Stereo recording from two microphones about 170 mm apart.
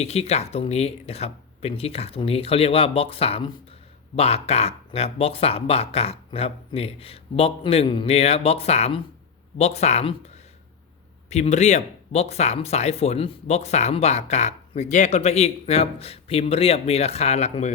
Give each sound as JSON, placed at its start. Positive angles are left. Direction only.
{"t": 0.0, "sound": "speech", "side_deg": 40}
{"t": 11.3, "sound": "speech", "side_deg": 40}